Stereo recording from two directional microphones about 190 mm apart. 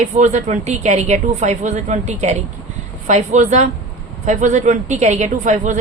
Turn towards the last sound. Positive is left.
turn(degrees=-40)  # may be behind; listen again after turning